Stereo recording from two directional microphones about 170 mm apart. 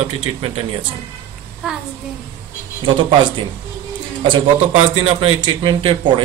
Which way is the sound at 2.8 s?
25° right (ahead or behind).